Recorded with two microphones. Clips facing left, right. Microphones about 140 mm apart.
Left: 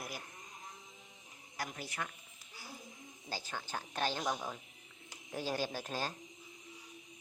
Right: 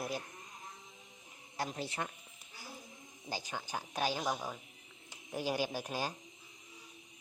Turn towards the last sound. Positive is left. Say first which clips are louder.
# right 1 dB
turn(degrees=-15)  # may be behind; listen again after turning